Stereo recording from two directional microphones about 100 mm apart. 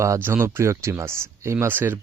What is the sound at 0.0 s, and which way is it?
Speech, 25° right (ahead or behind).